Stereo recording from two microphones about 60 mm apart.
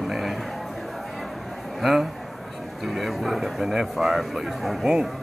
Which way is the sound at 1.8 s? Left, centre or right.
Centre.